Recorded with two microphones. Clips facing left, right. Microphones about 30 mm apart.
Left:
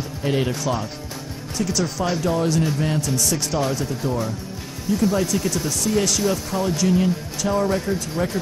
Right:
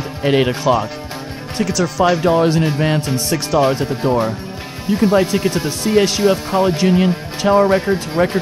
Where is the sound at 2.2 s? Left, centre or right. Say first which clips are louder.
Right 7 dB; right.